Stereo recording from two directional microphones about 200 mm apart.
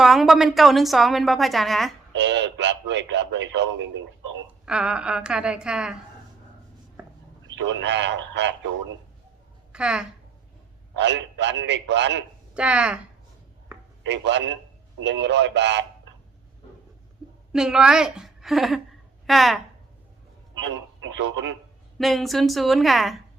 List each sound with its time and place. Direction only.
0.0 s a woman's voice: centre (ahead or behind)
2.1 s a man's voice: 60° right (ahead or behind)
4.6 s a woman's voice: 5° right (ahead or behind)
7.4 s a man's voice: 60° right (ahead or behind)
9.7 s a woman's voice: 5° right (ahead or behind)
10.9 s a man's voice: 60° right (ahead or behind)
12.5 s a woman's voice: 5° right (ahead or behind)
14.0 s a man's voice: 60° right (ahead or behind)
17.5 s a woman's voice: 5° right (ahead or behind)
21.2 s a man's voice: 65° right (ahead or behind)
21.9 s a woman's voice: centre (ahead or behind)